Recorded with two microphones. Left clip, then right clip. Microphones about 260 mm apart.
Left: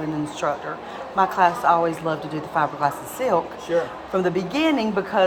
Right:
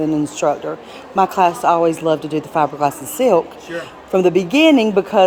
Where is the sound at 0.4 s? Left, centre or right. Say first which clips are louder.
Right 5 dB; right.